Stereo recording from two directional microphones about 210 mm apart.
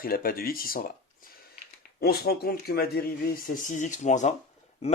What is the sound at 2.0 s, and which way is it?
A man's voice, 50° left (ahead or behind).